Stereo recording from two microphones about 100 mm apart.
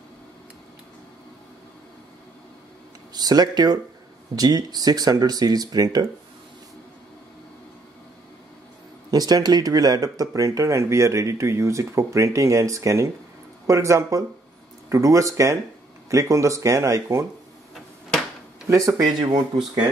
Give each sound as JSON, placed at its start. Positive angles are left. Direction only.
{"t": 3.1, "sound": "speech", "side_deg": -40}
{"t": 9.1, "sound": "speech", "side_deg": -40}
{"t": 18.7, "sound": "speech", "side_deg": -35}